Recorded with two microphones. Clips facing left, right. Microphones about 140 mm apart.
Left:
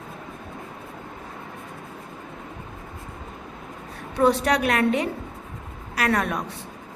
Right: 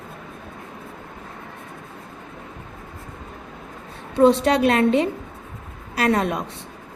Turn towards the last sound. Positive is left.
turn(degrees=-25)  # may be behind; listen again after turning